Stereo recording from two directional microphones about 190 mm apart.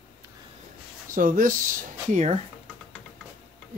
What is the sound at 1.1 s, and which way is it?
Speech, 45° right (ahead or behind).